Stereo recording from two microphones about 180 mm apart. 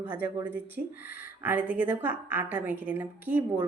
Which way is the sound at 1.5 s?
10° right (ahead or behind).